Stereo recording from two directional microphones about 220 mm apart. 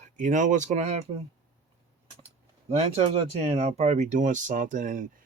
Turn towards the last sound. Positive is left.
turn(degrees=-35)  # may be behind; listen again after turning